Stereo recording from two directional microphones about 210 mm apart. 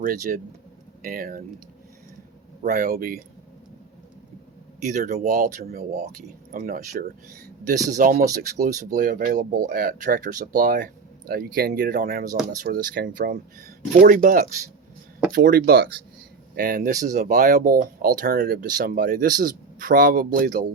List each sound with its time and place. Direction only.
0.0 s speech: 40° right (ahead or behind)
2.6 s speech: 40° right (ahead or behind)
4.8 s speech: 35° right (ahead or behind)
5.8 s speech: 35° right (ahead or behind)